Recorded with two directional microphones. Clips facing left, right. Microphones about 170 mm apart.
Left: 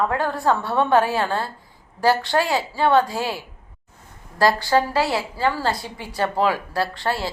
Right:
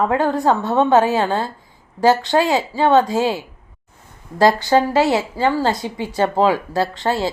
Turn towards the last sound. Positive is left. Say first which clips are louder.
# right 4 dB
turn(degrees=-20)  # may be behind; listen again after turning